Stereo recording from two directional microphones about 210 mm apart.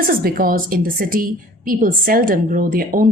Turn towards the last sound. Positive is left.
turn(degrees=-40)  # may be behind; listen again after turning